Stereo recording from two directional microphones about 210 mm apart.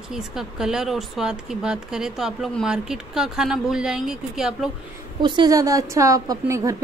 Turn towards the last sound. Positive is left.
turn(degrees=-15)  # may be behind; listen again after turning